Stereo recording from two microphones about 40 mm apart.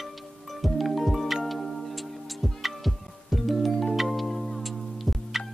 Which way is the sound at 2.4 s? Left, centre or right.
Centre.